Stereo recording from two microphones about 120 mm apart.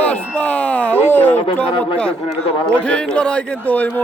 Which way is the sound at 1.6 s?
10° left (ahead or behind).